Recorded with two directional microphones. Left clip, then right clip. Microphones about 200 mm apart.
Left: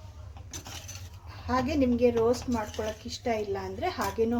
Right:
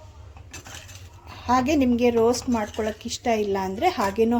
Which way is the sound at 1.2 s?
40° right (ahead or behind).